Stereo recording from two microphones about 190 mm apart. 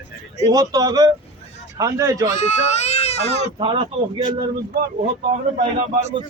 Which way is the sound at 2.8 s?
35° left (ahead or behind).